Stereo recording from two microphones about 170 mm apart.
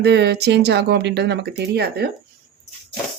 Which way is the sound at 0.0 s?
80° right.